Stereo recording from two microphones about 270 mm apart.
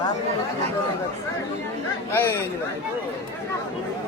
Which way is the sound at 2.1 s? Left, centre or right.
Centre.